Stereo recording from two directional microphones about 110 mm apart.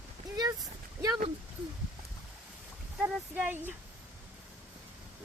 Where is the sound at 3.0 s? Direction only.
15° right (ahead or behind).